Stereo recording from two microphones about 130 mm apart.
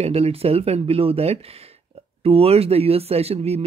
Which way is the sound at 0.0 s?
50° right (ahead or behind).